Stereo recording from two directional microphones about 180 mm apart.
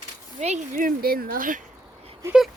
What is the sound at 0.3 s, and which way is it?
Speech, 40° right (ahead or behind).